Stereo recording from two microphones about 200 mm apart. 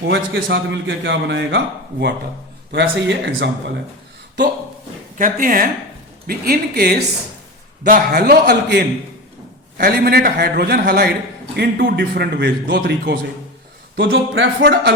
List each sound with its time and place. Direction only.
0.1 s a man's voice: 65° right (ahead or behind)
5.1 s a man's voice: 45° right (ahead or behind); by 14.9 s 60° right (ahead or behind)